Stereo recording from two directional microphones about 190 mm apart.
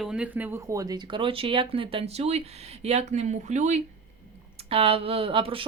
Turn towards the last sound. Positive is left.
turn(degrees=-30)  # may be behind; listen again after turning